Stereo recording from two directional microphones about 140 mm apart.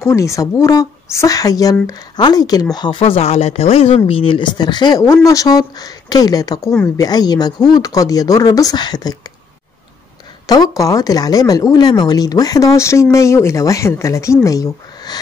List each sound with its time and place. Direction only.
0.0 s speech: 20° left (ahead or behind)
10.4 s speech: 25° left (ahead or behind)